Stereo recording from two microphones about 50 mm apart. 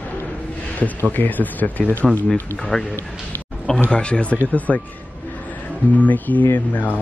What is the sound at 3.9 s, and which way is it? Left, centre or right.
Speech, left.